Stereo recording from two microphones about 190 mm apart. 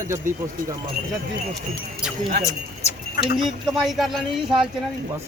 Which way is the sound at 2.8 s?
35° left (ahead or behind).